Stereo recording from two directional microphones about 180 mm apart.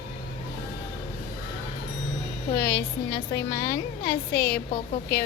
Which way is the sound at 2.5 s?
60° left (ahead or behind).